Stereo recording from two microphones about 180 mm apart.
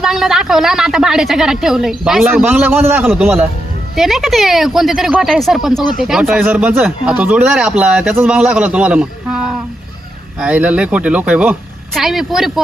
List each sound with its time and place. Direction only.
0.0 s a woman's voice: centre (ahead or behind)
3.9 s a woman's voice: centre (ahead or behind)